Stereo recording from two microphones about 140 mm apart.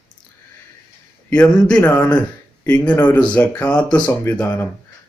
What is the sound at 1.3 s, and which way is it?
Speech, 10° left (ahead or behind).